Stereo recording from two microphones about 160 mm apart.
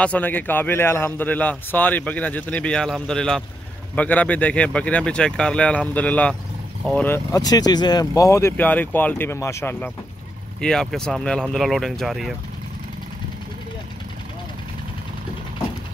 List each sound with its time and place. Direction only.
0.0 s a man's voice: 10° left (ahead or behind)
7.3 s a man's voice: 25° left (ahead or behind)
10.6 s speech: 5° left (ahead or behind)